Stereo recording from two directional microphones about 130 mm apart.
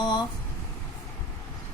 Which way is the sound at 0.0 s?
35° left (ahead or behind).